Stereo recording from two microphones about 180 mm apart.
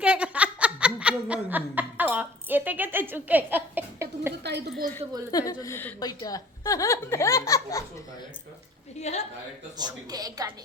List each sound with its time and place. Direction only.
0.0 s laughter: 10° right (ahead or behind)
4.4 s a sound: 70° right (ahead or behind)
5.3 s a woman's voice: 20° left (ahead or behind)
9.0 s a woman's voice: 40° left (ahead or behind)
9.7 s a woman's voice: 20° right (ahead or behind)